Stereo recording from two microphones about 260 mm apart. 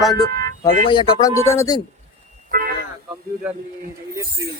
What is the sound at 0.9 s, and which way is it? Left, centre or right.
Speech, centre.